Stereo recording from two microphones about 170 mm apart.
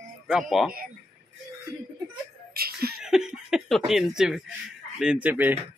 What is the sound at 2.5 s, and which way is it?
Laughter, 65° right (ahead or behind).